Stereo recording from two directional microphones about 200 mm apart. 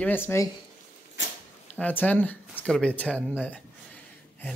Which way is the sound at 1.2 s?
65° left (ahead or behind).